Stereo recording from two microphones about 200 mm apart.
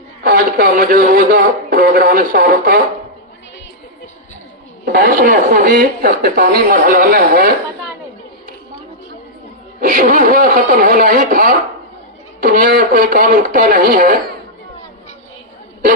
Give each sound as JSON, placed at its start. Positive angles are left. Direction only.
{"t": 0.2, "sound": "a man's voice", "side_deg": -45}
{"t": 4.9, "sound": "speech", "side_deg": -45}
{"t": 9.8, "sound": "speech", "side_deg": -40}